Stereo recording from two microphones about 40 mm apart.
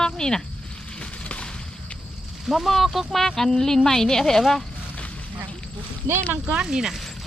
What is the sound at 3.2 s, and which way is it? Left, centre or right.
A woman's voice, centre.